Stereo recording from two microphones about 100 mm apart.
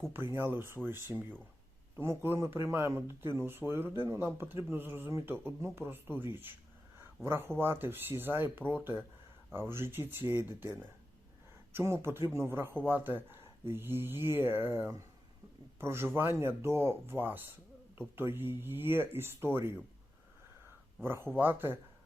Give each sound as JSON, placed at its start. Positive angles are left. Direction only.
{"t": 0.1, "sound": "speech", "side_deg": -20}
{"t": 11.7, "sound": "speech", "side_deg": -25}
{"t": 21.0, "sound": "speech", "side_deg": -25}